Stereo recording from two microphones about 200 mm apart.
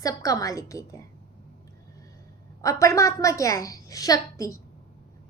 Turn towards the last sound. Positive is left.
turn(degrees=15)  # may be behind; listen again after turning